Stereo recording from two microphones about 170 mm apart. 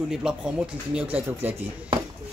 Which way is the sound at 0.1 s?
5° right (ahead or behind).